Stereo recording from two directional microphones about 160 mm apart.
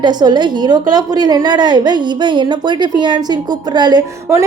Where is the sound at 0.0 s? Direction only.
25° right (ahead or behind).